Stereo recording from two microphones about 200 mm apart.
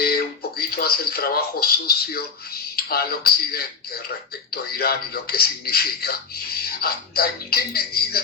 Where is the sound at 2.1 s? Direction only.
50° left (ahead or behind).